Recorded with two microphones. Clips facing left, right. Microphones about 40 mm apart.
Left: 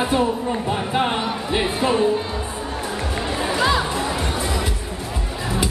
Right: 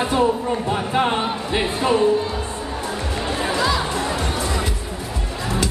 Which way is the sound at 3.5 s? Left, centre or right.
Left.